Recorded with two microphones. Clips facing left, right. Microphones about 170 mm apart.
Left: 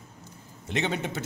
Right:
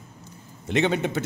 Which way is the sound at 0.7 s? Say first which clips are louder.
Right 6 dB; 65° right (ahead or behind).